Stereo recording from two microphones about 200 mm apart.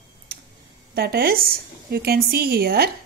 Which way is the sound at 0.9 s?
50° right (ahead or behind).